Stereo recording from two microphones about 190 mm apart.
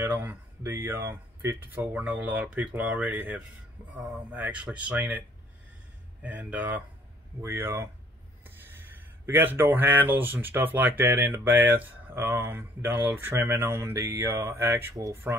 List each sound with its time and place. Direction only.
0.0 s speech: 10° right (ahead or behind)
6.2 s speech: 10° right (ahead or behind)